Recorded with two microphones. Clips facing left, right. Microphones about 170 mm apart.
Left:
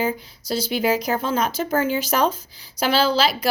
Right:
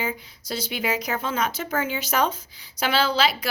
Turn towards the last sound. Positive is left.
turn(degrees=35)  # may be behind; listen again after turning